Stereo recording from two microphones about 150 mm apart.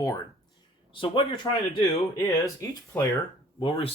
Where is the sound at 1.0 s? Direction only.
35° left (ahead or behind).